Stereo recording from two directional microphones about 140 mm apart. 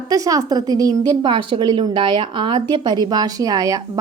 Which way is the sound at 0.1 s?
25° right (ahead or behind).